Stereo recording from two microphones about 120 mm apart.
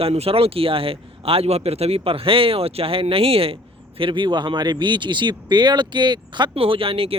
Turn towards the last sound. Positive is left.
turn(degrees=-50)  # may be behind; listen again after turning